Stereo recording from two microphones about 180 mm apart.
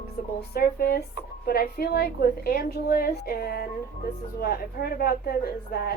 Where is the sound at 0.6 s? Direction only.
55° left (ahead or behind).